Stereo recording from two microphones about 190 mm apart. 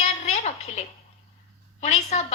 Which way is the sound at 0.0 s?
35° left (ahead or behind).